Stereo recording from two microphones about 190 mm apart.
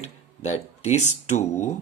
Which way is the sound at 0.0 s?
35° left (ahead or behind).